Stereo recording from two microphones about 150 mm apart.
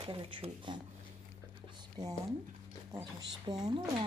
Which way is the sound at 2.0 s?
25° right (ahead or behind).